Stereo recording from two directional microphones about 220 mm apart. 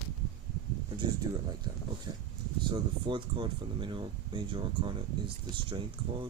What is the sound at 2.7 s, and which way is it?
Speech, 20° right (ahead or behind).